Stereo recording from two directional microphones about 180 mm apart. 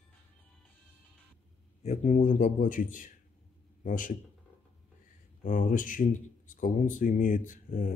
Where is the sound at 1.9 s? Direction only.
45° left (ahead or behind).